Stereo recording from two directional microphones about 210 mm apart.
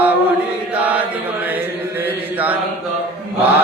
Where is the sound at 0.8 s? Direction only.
5° right (ahead or behind).